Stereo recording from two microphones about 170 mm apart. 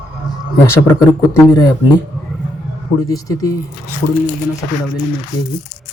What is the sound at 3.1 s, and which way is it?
Speech, 20° left (ahead or behind).